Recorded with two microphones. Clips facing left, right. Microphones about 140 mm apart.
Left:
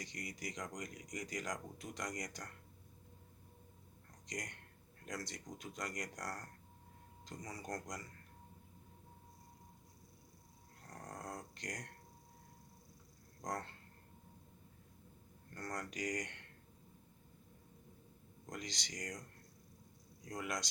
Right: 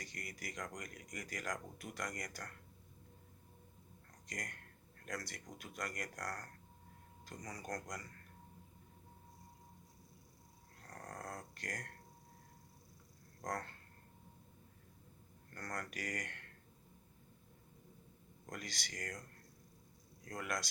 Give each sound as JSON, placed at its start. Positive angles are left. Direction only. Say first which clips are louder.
{"t": 0.0, "sound": "speech", "louder": "left 3 dB", "side_deg": 20}
{"t": 4.3, "sound": "speech", "louder": "left 2 dB", "side_deg": 20}
{"t": 10.8, "sound": "dog", "louder": "even", "side_deg": 20}
{"t": 13.4, "sound": "speech", "louder": "even", "side_deg": 20}
{"t": 15.5, "sound": "speech", "louder": "left 1 dB", "side_deg": 20}
{"t": 18.4, "sound": "speech", "louder": "left 1 dB", "side_deg": 20}
{"t": 20.2, "sound": "speech", "louder": "even", "side_deg": 20}